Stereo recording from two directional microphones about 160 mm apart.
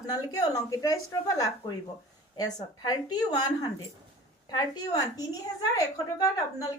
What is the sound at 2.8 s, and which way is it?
A woman's voice, 25° left (ahead or behind).